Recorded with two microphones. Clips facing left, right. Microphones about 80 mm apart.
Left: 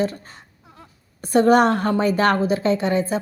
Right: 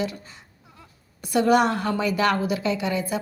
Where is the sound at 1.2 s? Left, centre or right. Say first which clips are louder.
Left 4 dB; left.